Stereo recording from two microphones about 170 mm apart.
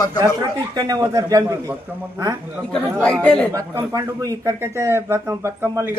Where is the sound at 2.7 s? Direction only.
5° left (ahead or behind).